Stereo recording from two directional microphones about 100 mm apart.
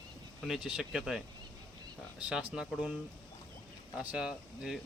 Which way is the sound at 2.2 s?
10° right (ahead or behind).